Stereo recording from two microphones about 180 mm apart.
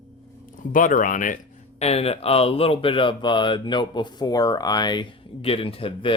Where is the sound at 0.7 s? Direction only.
45° left (ahead or behind).